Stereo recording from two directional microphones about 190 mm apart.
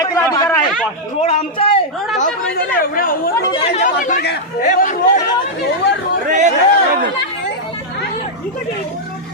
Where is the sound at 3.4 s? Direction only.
30° left (ahead or behind).